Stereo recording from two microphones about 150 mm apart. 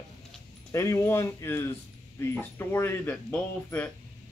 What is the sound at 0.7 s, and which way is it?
Speech, 20° left (ahead or behind).